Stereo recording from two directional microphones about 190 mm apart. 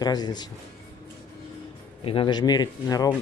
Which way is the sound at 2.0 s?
25° left (ahead or behind).